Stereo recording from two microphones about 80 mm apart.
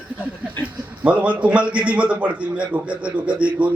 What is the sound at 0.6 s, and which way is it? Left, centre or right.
A man's voice, centre.